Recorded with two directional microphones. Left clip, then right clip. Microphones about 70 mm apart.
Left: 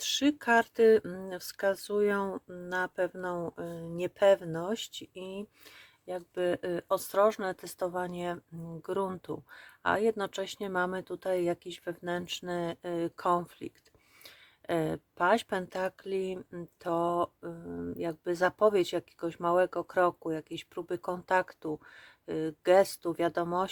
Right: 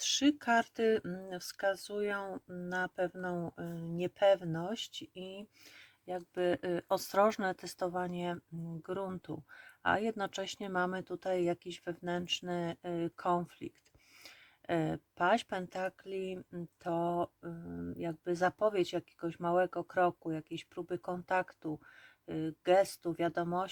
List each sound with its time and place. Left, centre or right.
0.0 s speech: centre
1.0 s speech: left
6.1 s speech: centre
7.8 s speech: centre
8.8 s speech: left
9.6 s speech: centre
14.3 s a sound: centre
15.4 s speech: left